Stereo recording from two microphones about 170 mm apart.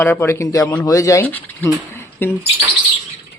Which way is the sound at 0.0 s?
10° left (ahead or behind).